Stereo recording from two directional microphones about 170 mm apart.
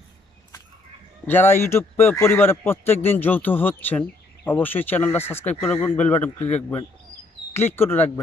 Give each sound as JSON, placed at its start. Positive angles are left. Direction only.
{"t": 1.2, "sound": "a man's voice", "side_deg": 10}